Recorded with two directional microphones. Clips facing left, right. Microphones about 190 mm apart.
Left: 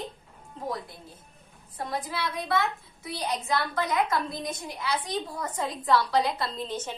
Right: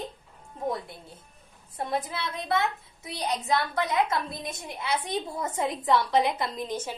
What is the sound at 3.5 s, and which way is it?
A woman's voice, 25° right (ahead or behind).